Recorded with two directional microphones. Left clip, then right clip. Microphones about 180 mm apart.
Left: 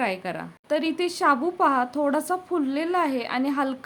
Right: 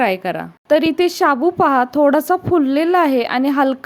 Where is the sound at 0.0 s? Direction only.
35° right (ahead or behind).